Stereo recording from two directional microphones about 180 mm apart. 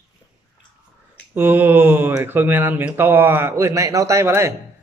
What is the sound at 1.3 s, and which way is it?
Speech, 10° right (ahead or behind).